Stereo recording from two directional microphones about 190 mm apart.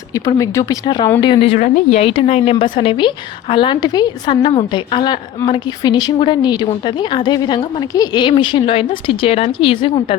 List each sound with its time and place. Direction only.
0.1 s a woman's voice: 20° left (ahead or behind)
1.5 s a woman's voice: 40° left (ahead or behind)